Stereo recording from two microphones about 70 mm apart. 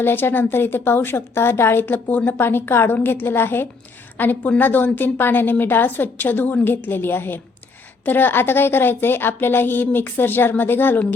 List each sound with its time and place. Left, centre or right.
0.0 s a woman's voice: left